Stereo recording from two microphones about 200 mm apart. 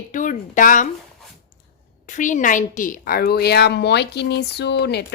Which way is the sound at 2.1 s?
40° left (ahead or behind).